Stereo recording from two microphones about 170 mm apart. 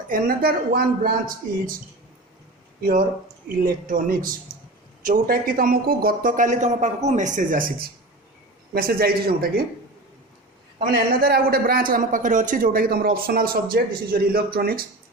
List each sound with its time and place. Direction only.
0.1 s a man's voice: 60° right (ahead or behind)
3.6 s a man's voice: 55° right (ahead or behind)
10.8 s a man's voice: 60° right (ahead or behind)